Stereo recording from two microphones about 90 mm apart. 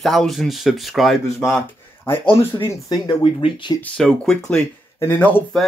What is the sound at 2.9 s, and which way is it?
Speech, 65° left (ahead or behind).